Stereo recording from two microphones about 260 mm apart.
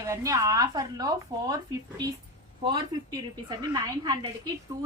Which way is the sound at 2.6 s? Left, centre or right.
Centre.